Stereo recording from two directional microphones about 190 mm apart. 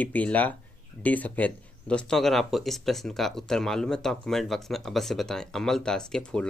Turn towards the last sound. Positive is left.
turn(degrees=5)  # may be behind; listen again after turning